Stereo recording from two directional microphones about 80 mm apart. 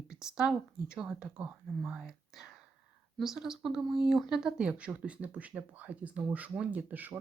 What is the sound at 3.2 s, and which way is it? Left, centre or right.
Speech, centre.